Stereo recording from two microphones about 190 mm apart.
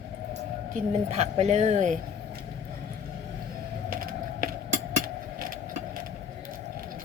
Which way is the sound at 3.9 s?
50° right (ahead or behind).